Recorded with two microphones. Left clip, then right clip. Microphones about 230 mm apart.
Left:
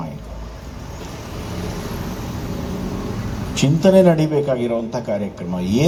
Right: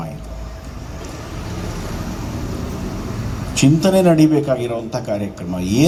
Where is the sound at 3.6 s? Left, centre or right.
Right.